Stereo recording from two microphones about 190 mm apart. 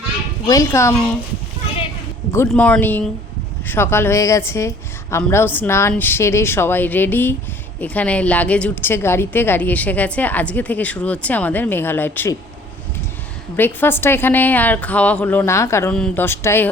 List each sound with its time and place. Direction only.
0.4 s a woman's voice: 15° left (ahead or behind)
2.5 s a woman's voice: 5° left (ahead or behind)
13.6 s a woman's voice: 10° left (ahead or behind)